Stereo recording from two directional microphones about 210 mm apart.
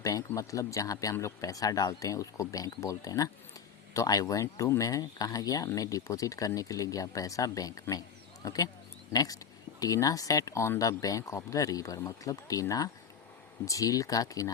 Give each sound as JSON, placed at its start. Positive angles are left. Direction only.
{"t": 0.0, "sound": "speech", "side_deg": 15}